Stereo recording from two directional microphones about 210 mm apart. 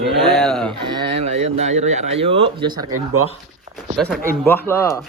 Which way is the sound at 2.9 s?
90° right.